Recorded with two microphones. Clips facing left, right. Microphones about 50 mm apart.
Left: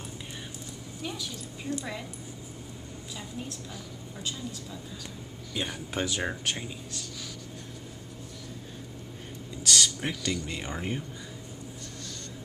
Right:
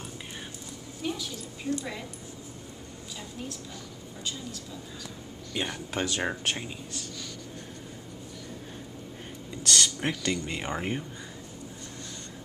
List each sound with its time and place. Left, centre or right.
1.0 s a woman's voice: centre
4.2 s a woman's voice: centre
5.7 s speech: centre
6.2 s speech: centre
9.7 s speech: centre
10.6 s speech: right